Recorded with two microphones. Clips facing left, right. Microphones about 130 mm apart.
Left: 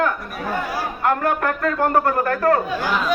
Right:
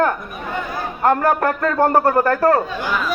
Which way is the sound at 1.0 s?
35° right (ahead or behind).